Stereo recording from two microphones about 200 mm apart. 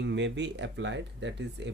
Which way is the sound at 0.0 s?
65° right (ahead or behind).